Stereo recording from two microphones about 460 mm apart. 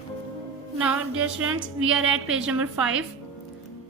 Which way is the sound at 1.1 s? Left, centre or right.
Right.